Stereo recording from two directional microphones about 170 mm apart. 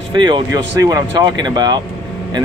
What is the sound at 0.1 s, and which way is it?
Speech, 25° right (ahead or behind).